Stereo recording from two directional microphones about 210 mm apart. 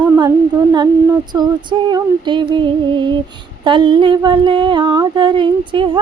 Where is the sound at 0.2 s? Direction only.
20° right (ahead or behind).